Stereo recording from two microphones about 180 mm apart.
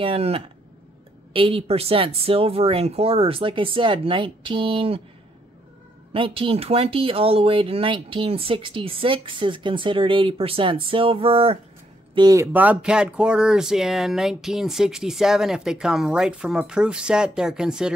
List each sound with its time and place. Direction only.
0.0 s speech: 30° right (ahead or behind)
6.1 s speech: 30° right (ahead or behind)
12.5 s speech: 5° right (ahead or behind)